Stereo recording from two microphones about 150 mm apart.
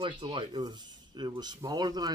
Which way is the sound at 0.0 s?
35° right (ahead or behind).